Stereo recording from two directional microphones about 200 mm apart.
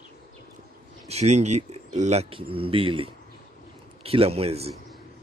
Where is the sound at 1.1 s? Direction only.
35° right (ahead or behind).